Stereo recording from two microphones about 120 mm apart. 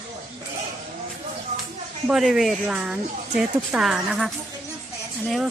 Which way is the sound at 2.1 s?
5° right (ahead or behind).